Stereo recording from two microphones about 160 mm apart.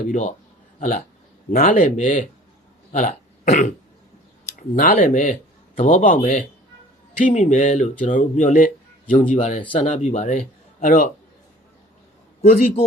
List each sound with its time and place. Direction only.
0.1 s speech: 50° left (ahead or behind)
2.9 s throat clearing: 50° left (ahead or behind)
4.7 s speech: 55° left (ahead or behind)
12.4 s a man's voice: 40° left (ahead or behind)